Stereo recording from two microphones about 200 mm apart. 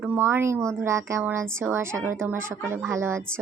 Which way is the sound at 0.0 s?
10° right (ahead or behind).